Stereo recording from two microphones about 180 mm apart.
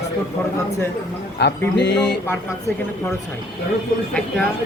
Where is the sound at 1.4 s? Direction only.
70° left (ahead or behind).